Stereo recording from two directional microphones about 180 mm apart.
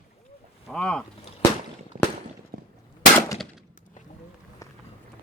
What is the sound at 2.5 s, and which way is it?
Gunshot, 55° right (ahead or behind).